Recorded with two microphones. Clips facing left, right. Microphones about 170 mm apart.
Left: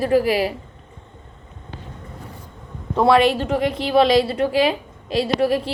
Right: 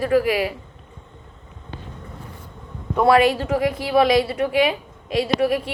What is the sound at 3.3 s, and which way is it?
A woman's voice, 20° left (ahead or behind).